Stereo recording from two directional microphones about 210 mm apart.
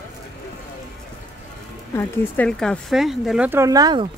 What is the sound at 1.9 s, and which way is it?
Speech, 10° left (ahead or behind).